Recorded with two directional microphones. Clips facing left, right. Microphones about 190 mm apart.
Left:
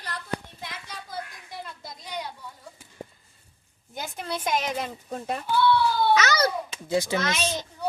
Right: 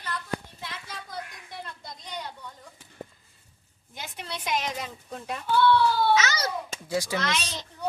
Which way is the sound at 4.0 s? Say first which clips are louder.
Left 5 dB; 45° left (ahead or behind).